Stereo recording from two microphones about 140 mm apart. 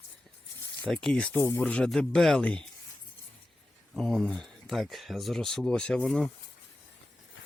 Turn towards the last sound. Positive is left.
turn(degrees=5)  # may be behind; listen again after turning